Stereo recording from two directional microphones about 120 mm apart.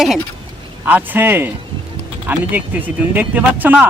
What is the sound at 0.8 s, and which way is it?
A man's voice, 15° right (ahead or behind).